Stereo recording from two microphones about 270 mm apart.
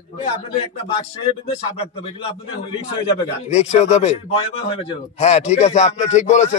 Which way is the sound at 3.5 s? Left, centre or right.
Left.